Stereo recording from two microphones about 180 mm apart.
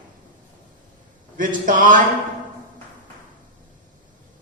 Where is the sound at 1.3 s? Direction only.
50° right (ahead or behind).